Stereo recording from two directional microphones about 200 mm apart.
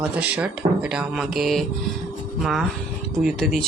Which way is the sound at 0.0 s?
5° right (ahead or behind).